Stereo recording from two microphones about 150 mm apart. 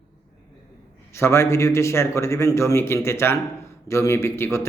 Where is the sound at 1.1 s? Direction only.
20° left (ahead or behind).